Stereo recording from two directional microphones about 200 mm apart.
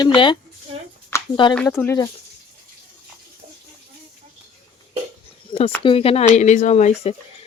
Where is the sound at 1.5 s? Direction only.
10° left (ahead or behind).